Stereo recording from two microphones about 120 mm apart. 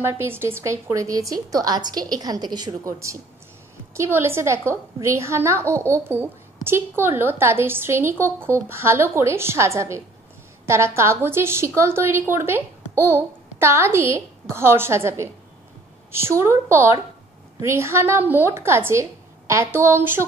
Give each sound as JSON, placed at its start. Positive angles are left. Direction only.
{"t": 0.0, "sound": "a woman's voice", "side_deg": -20}